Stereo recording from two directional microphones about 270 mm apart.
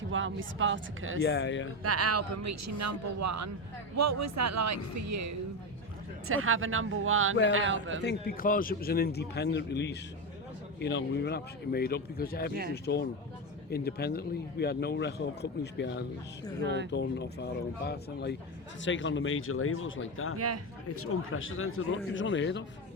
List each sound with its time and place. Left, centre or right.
0.1 s speech: right
1.2 s speech: left
1.8 s speech: right
6.2 s speech: right
8.0 s speech: left
16.6 s speech: right
16.9 s speech: left
20.3 s a man's voice: right
20.8 s speech: left